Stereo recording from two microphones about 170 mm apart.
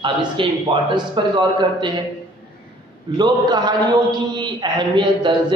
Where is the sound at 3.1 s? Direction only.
25° right (ahead or behind).